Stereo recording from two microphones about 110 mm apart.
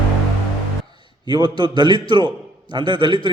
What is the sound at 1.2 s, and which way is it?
A man's voice, 40° right (ahead or behind).